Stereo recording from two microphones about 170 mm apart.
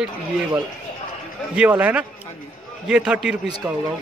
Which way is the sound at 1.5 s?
5° right (ahead or behind).